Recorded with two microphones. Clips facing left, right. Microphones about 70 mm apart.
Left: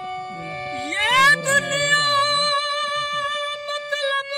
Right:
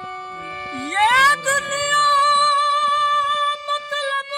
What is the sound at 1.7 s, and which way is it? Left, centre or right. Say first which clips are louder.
Music: right 3 dB; right.